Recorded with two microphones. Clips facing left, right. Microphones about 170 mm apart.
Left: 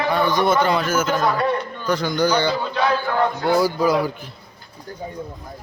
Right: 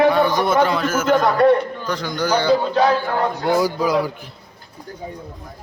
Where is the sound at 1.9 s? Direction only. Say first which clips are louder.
Left 4 dB; centre (ahead or behind).